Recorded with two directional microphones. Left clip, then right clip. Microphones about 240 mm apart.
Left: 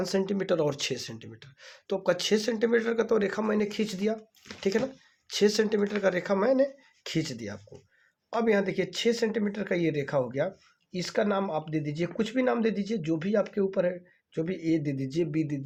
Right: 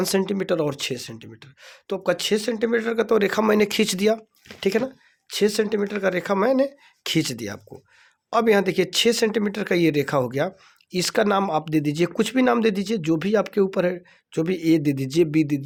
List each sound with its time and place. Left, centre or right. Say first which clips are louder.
0.0 s speech: right 6 dB; right
5.3 s speech: right 3 dB; right